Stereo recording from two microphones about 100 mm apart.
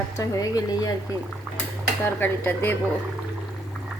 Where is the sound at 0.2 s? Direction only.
35° left (ahead or behind).